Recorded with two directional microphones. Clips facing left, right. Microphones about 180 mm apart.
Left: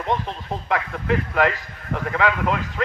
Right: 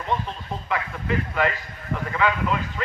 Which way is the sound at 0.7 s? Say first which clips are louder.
Left 4 dB; 70° left (ahead or behind).